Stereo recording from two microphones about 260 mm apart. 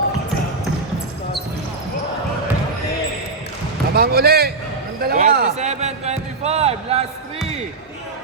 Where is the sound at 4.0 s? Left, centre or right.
Right.